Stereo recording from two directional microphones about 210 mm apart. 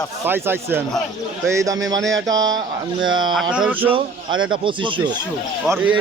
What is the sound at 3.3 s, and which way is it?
Speech, 5° right (ahead or behind).